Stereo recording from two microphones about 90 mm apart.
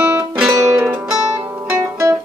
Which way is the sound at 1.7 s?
30° right (ahead or behind).